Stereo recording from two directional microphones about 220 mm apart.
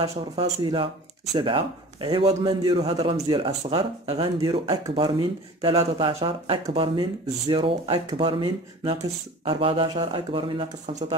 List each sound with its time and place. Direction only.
0.0 s a man's voice: 20° right (ahead or behind)